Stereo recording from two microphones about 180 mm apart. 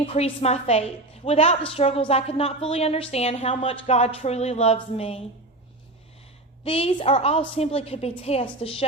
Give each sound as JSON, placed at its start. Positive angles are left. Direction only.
{"t": 0.0, "sound": "a woman's voice", "side_deg": 35}
{"t": 6.7, "sound": "a woman's voice", "side_deg": 35}